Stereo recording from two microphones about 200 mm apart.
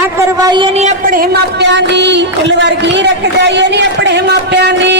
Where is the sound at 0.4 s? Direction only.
25° right (ahead or behind).